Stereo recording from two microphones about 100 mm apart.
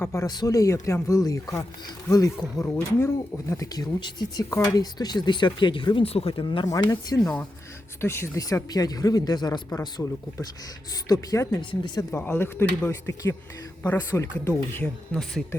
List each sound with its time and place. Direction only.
0.0 s speech: 30° left (ahead or behind)
0.3 s speech: 40° left (ahead or behind)
6.7 s speech: 40° left (ahead or behind)
8.0 s speech: 25° left (ahead or behind); by 9.6 s 40° left (ahead or behind)
10.0 s speech: 30° left (ahead or behind)
10.9 s speech: 40° left (ahead or behind)
11.7 s speech: 50° left (ahead or behind)
12.1 s speech: 20° left (ahead or behind)
15.1 s speech: 5° left (ahead or behind)